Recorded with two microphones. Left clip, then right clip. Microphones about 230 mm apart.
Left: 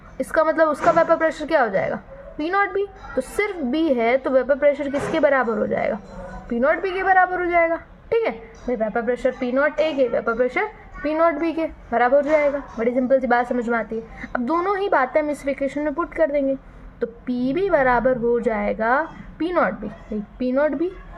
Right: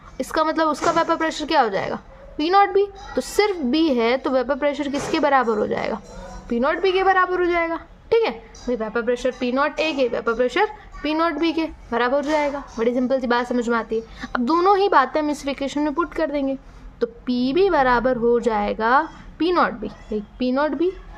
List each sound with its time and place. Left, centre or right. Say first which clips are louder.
0.2 s a woman's voice: left 2 dB; right